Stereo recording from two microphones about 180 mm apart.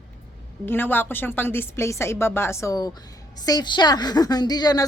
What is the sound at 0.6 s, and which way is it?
A woman's voice, 10° left (ahead or behind).